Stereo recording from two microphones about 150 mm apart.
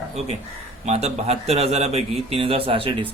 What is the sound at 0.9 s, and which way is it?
A man's voice, 45° right (ahead or behind).